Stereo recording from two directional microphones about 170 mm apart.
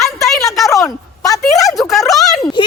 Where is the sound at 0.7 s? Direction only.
20° left (ahead or behind).